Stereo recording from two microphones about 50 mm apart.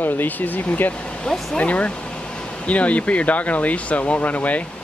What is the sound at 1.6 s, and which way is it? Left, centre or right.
Speech, left.